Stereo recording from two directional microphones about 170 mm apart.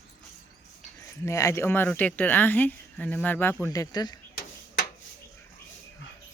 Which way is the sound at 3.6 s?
20° left (ahead or behind).